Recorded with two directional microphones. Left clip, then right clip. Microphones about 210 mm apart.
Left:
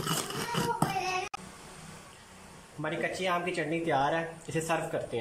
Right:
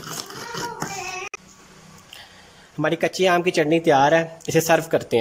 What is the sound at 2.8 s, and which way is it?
Speech, 50° right (ahead or behind).